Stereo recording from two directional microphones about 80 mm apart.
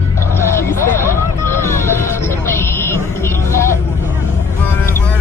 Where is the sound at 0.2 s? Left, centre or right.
Left.